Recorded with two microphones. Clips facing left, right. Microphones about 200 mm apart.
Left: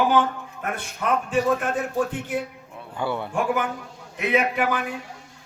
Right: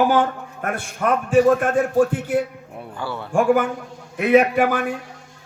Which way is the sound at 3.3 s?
45° right (ahead or behind).